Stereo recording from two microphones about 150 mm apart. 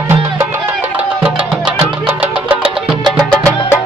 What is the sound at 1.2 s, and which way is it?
Music, 5° right (ahead or behind).